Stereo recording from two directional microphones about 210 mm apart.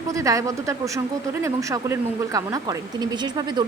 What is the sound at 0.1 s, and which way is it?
Speech, 15° right (ahead or behind).